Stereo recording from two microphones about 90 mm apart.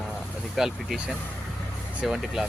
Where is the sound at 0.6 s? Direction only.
5° right (ahead or behind).